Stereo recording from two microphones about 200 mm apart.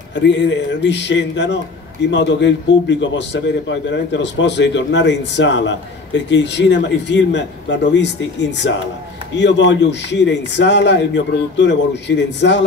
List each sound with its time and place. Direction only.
0.1 s a man's voice: 65° left (ahead or behind)